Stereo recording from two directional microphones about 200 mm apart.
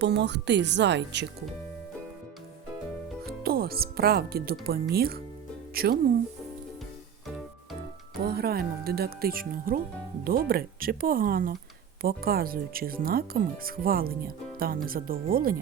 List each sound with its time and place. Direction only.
0.0 s speech: 60° right (ahead or behind)
3.4 s speech: 50° right (ahead or behind)
8.2 s speech: 50° right (ahead or behind)